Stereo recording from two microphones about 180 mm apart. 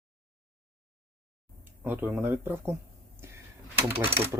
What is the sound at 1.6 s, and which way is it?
Speech, 10° right (ahead or behind).